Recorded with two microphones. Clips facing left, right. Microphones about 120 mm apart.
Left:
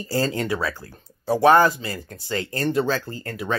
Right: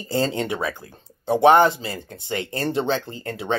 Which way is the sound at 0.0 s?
25° right (ahead or behind).